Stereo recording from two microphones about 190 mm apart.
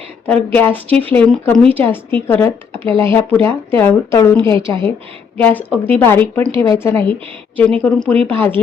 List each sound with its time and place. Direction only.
0.5 s speech: 10° left (ahead or behind)
4.5 s a woman's voice: 25° right (ahead or behind)
5.4 s speech: 10° left (ahead or behind)